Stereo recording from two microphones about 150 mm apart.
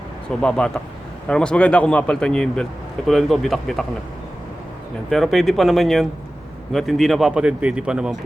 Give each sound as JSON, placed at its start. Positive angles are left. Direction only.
{"t": 0.3, "sound": "a man's voice", "side_deg": 5}
{"t": 5.0, "sound": "speech", "side_deg": 0}